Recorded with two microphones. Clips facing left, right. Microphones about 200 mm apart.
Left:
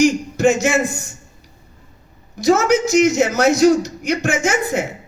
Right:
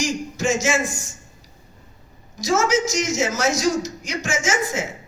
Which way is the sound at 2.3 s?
60° left (ahead or behind).